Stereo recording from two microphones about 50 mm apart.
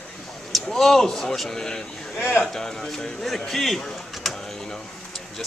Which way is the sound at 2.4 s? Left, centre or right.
Centre.